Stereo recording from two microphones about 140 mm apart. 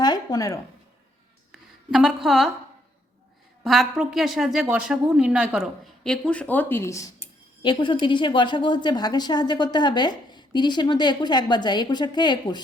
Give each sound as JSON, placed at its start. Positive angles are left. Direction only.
{"t": 0.0, "sound": "a sound", "side_deg": 30}
{"t": 1.9, "sound": "a woman's voice", "side_deg": -5}
{"t": 3.6, "sound": "a woman's voice", "side_deg": 0}
{"t": 7.6, "sound": "a woman's voice", "side_deg": 35}